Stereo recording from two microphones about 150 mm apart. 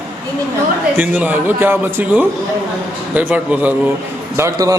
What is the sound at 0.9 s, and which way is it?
A man's voice, 15° right (ahead or behind).